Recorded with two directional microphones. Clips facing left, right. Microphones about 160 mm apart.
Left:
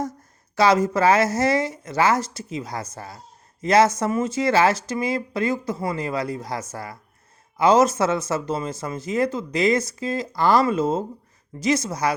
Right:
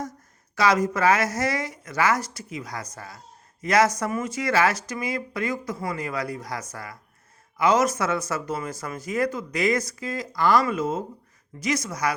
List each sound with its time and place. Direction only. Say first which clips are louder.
0.5 s speech: left 4 dB; 30° left (ahead or behind)